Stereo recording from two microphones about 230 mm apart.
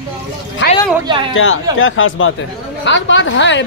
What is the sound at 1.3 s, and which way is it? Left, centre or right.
A woman's voice, left.